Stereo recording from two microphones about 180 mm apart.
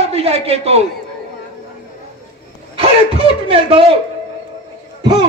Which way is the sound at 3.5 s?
30° right (ahead or behind).